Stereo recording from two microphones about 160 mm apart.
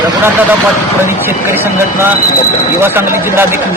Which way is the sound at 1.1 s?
15° right (ahead or behind).